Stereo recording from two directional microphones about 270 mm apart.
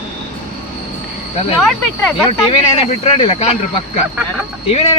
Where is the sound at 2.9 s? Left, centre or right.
Left.